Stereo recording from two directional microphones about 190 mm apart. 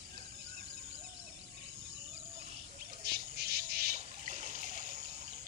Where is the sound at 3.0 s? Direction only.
55° right (ahead or behind).